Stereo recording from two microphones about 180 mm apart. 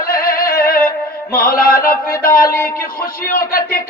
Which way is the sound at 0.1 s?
55° left (ahead or behind).